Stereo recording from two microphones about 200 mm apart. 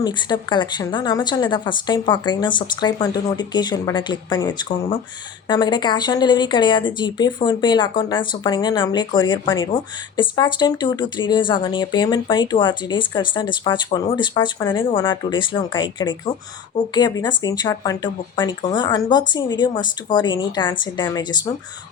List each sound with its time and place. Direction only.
0.0 s a woman's voice: 20° left (ahead or behind)